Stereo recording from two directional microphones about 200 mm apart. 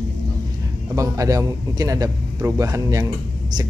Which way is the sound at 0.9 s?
15° right (ahead or behind).